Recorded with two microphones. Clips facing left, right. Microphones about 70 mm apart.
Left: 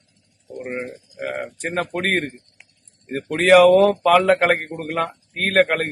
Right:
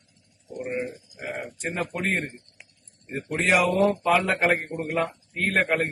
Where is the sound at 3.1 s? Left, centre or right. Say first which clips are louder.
Left 9 dB; left.